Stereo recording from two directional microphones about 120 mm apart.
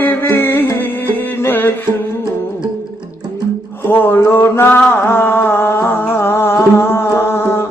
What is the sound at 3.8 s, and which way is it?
Mantra, 15° left (ahead or behind).